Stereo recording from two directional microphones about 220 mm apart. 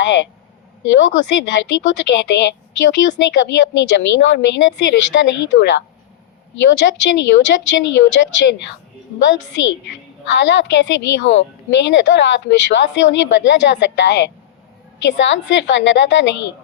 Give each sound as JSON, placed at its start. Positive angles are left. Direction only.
{"t": 0.0, "sound": "a woman's voice", "side_deg": 55}
{"t": 6.7, "sound": "a woman's voice", "side_deg": 55}
{"t": 9.5, "sound": "a woman's voice", "side_deg": 55}